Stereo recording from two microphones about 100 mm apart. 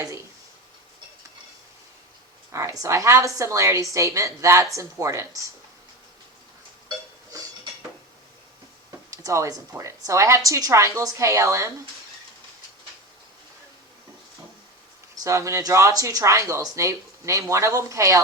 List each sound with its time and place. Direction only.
2.5 s speech: 30° right (ahead or behind)
7.3 s a sound: 35° right (ahead or behind)
9.0 s speech: 30° right (ahead or behind)
15.2 s speech: 30° right (ahead or behind)